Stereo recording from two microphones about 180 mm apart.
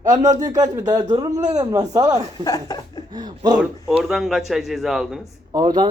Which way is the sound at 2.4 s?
20° left (ahead or behind).